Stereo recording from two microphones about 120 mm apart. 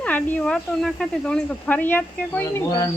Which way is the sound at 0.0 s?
10° left (ahead or behind).